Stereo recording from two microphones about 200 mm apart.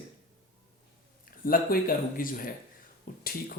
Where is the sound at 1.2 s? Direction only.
45° left (ahead or behind).